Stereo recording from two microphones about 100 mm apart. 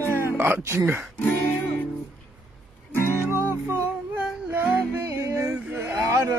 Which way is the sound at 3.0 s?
25° left (ahead or behind).